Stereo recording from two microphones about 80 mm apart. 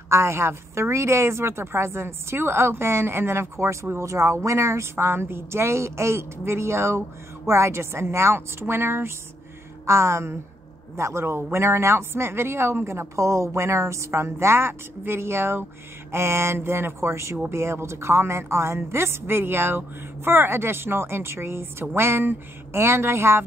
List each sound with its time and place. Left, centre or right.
0.1 s a woman's voice: right